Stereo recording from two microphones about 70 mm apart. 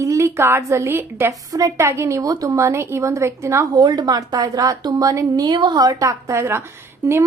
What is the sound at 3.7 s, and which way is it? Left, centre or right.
A woman's voice, right.